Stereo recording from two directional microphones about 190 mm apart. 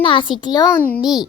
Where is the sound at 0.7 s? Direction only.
5° left (ahead or behind).